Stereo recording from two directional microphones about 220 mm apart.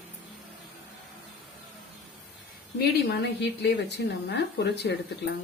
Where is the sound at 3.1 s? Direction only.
50° left (ahead or behind).